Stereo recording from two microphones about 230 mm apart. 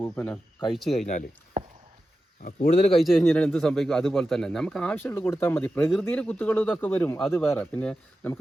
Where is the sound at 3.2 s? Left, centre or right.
Centre.